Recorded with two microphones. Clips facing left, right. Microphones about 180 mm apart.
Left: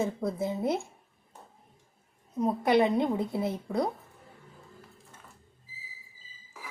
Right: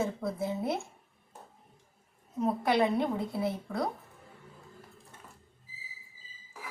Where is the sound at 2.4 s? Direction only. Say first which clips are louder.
Left 3 dB; 20° left (ahead or behind).